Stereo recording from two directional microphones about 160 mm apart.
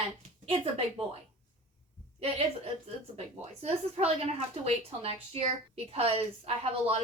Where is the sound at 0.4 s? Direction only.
35° right (ahead or behind).